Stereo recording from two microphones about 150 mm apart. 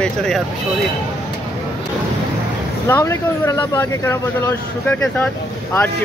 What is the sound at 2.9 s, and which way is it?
Speech, 20° left (ahead or behind).